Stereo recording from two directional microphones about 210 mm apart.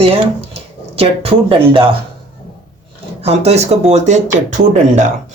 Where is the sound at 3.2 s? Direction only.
30° right (ahead or behind).